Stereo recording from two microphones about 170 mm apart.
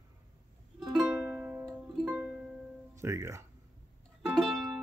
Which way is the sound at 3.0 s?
15° right (ahead or behind).